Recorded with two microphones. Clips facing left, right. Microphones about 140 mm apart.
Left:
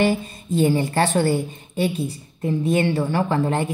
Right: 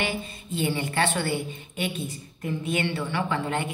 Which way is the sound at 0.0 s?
40° left (ahead or behind).